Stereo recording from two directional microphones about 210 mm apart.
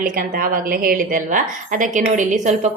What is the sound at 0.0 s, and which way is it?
A woman's voice, 40° right (ahead or behind).